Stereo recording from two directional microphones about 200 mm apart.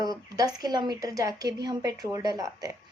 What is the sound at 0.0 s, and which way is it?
A woman's voice, 20° right (ahead or behind).